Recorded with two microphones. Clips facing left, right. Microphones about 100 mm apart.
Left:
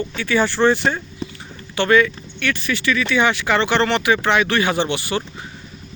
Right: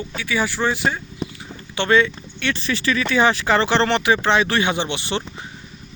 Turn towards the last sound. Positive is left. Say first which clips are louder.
# left 3 dB
turn(degrees=-25)  # may be behind; listen again after turning